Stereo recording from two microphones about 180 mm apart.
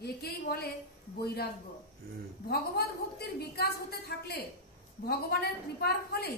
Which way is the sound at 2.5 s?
60° left (ahead or behind).